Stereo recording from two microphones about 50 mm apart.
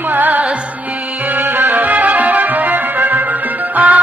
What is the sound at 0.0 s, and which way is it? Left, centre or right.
Music, right.